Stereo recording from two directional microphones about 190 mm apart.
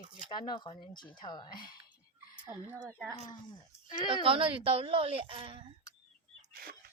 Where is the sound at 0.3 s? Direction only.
25° left (ahead or behind).